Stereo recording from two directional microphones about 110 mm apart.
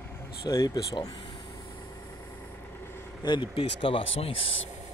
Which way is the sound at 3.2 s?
45° left (ahead or behind).